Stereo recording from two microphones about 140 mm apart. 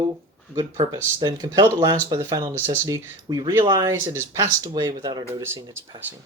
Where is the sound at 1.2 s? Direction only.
30° right (ahead or behind).